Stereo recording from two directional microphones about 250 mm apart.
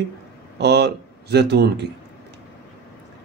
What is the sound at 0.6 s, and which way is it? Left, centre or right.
Speech, right.